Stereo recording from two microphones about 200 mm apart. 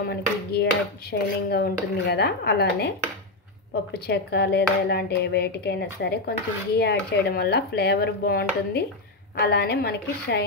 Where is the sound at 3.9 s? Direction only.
55° left (ahead or behind).